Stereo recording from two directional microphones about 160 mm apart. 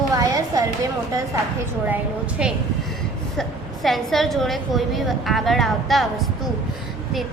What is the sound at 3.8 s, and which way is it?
A woman's voice, centre (ahead or behind).